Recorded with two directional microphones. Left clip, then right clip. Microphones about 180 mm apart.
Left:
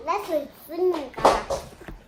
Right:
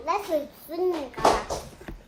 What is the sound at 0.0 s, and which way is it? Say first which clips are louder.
Speech: left 1 dB; centre (ahead or behind).